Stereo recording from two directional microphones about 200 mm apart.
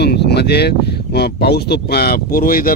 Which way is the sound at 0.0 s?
55° left (ahead or behind).